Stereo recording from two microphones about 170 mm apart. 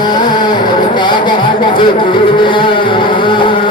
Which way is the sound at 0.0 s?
25° left (ahead or behind).